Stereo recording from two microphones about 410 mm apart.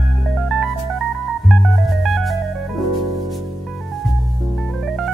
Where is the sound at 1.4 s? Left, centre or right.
Centre.